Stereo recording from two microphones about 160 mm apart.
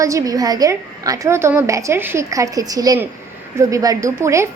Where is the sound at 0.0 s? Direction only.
20° right (ahead or behind).